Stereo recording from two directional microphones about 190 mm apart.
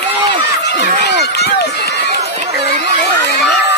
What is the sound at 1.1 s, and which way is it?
Run, 60° left (ahead or behind).